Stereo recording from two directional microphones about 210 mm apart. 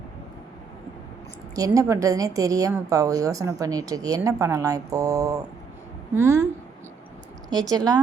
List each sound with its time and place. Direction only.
1.5 s a woman's voice: 15° right (ahead or behind)
7.5 s a woman's voice: 20° right (ahead or behind)